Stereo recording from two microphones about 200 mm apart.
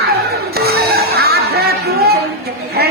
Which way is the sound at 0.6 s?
50° right (ahead or behind).